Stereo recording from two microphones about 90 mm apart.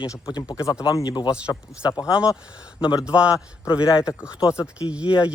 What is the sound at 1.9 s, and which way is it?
Speech, 40° left (ahead or behind).